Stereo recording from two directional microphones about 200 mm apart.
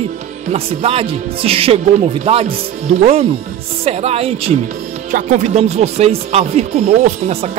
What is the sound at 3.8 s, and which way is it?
Speech, 30° right (ahead or behind).